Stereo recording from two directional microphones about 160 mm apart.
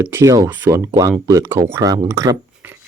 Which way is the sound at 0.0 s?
15° right (ahead or behind).